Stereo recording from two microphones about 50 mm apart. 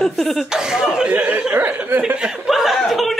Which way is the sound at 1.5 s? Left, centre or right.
Right.